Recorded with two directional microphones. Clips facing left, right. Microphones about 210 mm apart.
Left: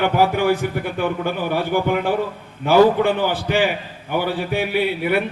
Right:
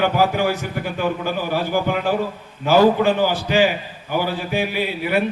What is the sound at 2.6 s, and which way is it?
A man's voice, 55° left (ahead or behind).